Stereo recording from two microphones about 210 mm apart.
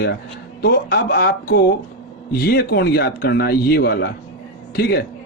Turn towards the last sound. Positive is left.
turn(degrees=50)  # may be behind; listen again after turning